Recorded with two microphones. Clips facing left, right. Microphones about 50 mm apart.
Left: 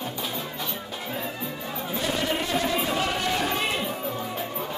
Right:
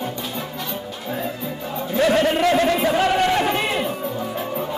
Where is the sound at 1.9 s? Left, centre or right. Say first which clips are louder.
Right 10 dB; right.